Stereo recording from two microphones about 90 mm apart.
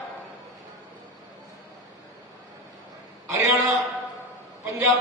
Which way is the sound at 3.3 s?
35° right (ahead or behind).